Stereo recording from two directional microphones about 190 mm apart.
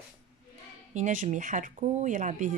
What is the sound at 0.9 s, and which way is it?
Speech, 40° right (ahead or behind).